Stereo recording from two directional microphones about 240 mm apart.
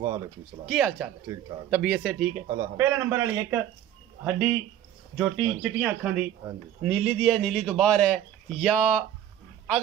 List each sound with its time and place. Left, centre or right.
0.7 s a man's voice: centre
1.2 s speech: centre
1.7 s a man's voice: centre